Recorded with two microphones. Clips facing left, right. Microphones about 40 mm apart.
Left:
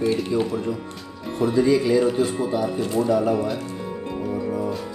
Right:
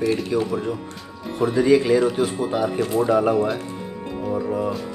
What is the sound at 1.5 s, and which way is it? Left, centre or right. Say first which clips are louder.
Speech: right 2 dB; right.